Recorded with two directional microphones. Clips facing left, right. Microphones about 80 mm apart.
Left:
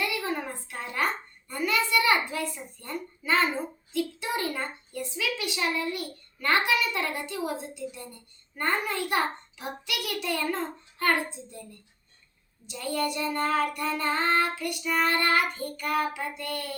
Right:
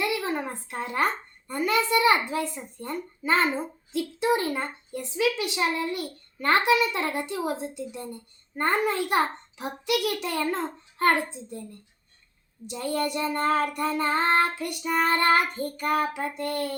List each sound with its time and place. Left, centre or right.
0.2 s a sound: right
1.5 s a child's voice: right
12.7 s a child's voice: right